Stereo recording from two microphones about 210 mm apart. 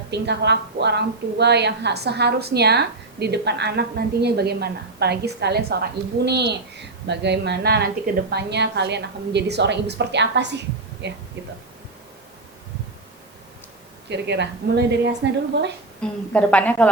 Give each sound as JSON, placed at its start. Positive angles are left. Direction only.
{"t": 0.1, "sound": "a woman's voice", "side_deg": -55}
{"t": 14.1, "sound": "a woman's voice", "side_deg": -55}
{"t": 16.0, "sound": "a woman's voice", "side_deg": 5}